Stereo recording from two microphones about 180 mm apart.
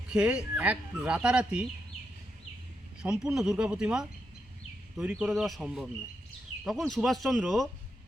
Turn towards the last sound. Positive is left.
turn(degrees=0)  # may be behind; listen again after turning